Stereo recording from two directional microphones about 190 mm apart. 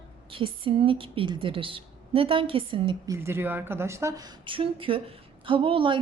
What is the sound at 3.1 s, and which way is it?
A woman's voice, 15° right (ahead or behind).